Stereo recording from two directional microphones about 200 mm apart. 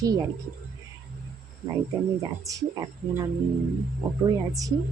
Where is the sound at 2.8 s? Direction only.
15° right (ahead or behind).